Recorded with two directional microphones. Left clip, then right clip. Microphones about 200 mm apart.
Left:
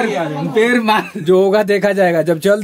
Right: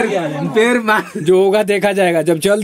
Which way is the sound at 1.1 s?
Centre (ahead or behind).